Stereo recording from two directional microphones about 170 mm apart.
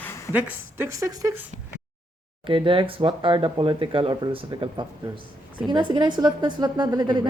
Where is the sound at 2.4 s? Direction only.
30° right (ahead or behind).